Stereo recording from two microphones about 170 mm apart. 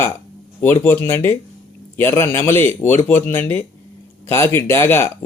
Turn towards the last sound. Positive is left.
turn(degrees=15)  # may be behind; listen again after turning